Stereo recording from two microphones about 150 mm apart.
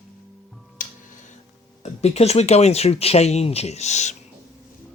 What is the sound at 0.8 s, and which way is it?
Music, 60° left (ahead or behind).